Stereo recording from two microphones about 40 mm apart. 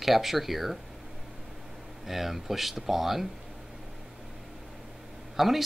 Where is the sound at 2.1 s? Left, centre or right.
Centre.